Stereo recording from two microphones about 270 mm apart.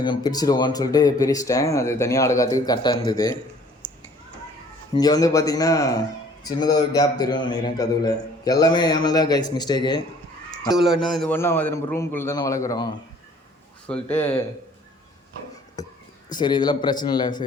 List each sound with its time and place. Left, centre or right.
0.0 s a man's voice: centre
4.9 s a man's voice: centre
10.7 s a man's voice: centre
15.8 s a sound: centre
16.3 s a man's voice: centre